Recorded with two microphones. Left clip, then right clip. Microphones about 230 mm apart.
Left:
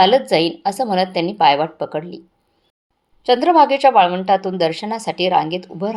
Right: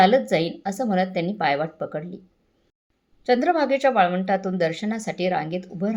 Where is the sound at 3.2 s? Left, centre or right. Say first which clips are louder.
Left 8 dB; left.